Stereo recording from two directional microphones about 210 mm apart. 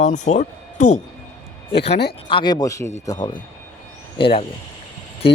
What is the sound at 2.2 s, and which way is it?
Speech, 20° left (ahead or behind).